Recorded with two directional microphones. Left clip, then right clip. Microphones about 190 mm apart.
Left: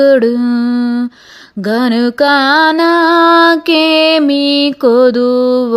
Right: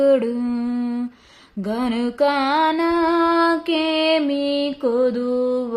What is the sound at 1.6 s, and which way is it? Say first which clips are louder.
Music: left 11 dB; 45° left (ahead or behind).